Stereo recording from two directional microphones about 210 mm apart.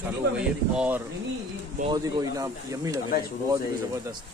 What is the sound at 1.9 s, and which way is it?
Speech, 15° right (ahead or behind).